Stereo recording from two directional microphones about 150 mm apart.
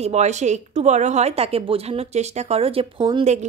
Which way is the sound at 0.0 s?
50° right (ahead or behind).